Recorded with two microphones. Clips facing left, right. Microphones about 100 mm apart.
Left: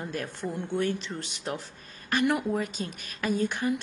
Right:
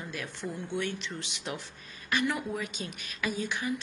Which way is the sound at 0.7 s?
40° left (ahead or behind).